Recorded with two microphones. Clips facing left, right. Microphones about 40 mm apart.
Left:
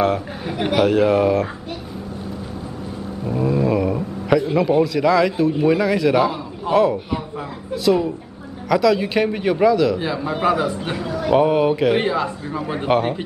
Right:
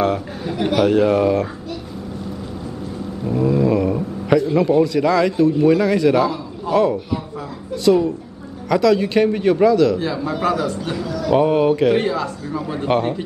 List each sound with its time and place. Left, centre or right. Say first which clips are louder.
0.4 s a man's voice: right 1 dB; centre
0.8 s speech: right 1 dB; centre
3.6 s speech: right 2 dB; centre
4.8 s speech: even; centre
5.5 s a man's voice: right 2 dB; centre
6.2 s a man's voice: even; centre
7.7 s a man's voice: right 2 dB; centre; by 11.3 s left
11.3 s a man's voice: right 1 dB; centre
12.0 s speech: left 1 dB; left
12.8 s a man's voice: even; centre